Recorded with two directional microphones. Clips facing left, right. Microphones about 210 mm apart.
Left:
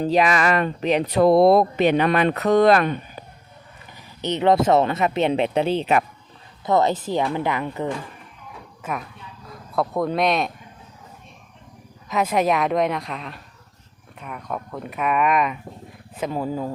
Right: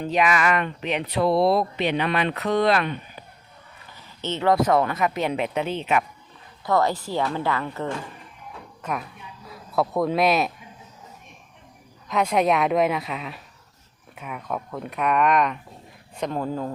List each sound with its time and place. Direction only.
0.0 s speech: 35° left (ahead or behind)
4.2 s speech: 15° left (ahead or behind); by 6.1 s 35° left (ahead or behind)
6.7 s speech: 20° left (ahead or behind)
8.8 s speech: centre (ahead or behind)
12.0 s speech: centre (ahead or behind)